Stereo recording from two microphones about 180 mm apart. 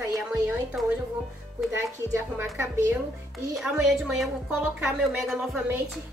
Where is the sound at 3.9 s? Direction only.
Centre (ahead or behind).